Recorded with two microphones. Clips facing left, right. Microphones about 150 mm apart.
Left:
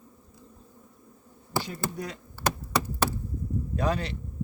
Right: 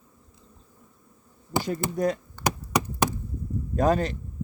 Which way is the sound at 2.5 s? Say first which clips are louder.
Right 2 dB; 15° right (ahead or behind).